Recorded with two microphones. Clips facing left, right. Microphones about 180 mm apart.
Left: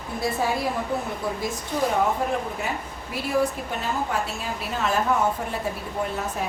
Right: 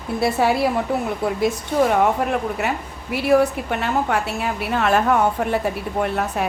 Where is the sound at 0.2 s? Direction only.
75° right (ahead or behind).